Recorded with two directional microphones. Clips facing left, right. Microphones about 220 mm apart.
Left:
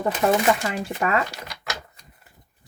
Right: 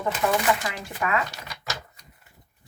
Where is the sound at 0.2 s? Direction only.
40° left (ahead or behind).